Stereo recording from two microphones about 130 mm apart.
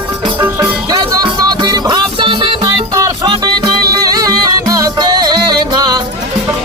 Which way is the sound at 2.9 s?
25° right (ahead or behind).